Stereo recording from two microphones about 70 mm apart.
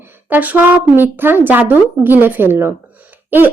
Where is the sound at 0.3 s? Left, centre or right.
Right.